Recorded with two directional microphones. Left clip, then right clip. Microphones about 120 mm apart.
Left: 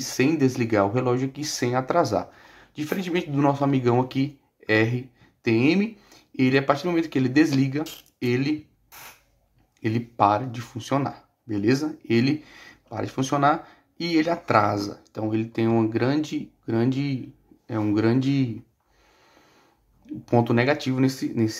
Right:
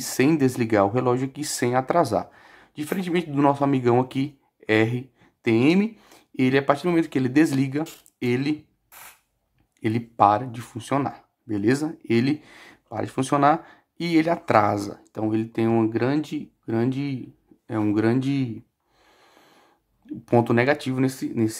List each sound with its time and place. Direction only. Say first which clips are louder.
0.0 s speech: right 1 dB; 40° right (ahead or behind)
9.8 s speech: right 2 dB; 40° right (ahead or behind)
19.0 s snort: right 2 dB; 45° right (ahead or behind)
20.2 s speech: right 1 dB; 40° right (ahead or behind)